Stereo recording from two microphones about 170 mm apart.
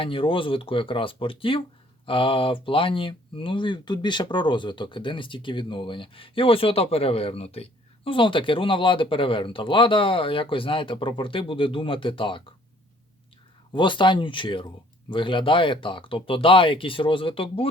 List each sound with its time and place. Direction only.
0.0 s speech: 30° left (ahead or behind)
13.7 s speech: 30° left (ahead or behind)